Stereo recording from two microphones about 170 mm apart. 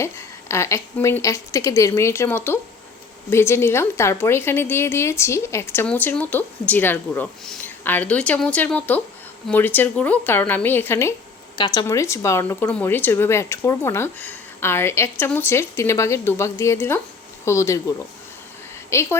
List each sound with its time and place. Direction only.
0.0 s a woman's voice: 15° left (ahead or behind)
11.5 s a woman's voice: 25° left (ahead or behind)
18.9 s a woman's voice: 15° left (ahead or behind)